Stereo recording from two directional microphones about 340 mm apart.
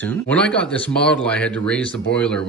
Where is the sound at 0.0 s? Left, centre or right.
Centre.